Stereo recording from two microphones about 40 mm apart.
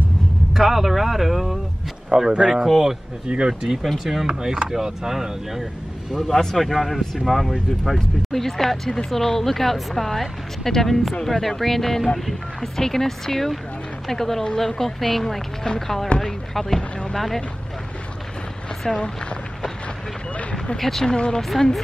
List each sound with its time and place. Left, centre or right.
0.5 s speech: centre
2.1 s speech: centre
3.3 s speech: right
3.8 s speech: centre
4.3 s speech: centre
18.8 s speech: centre
20.7 s speech: centre
21.1 s speech: left
21.4 s speech: centre